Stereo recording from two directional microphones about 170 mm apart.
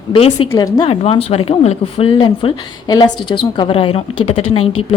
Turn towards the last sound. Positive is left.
turn(degrees=35)  # may be behind; listen again after turning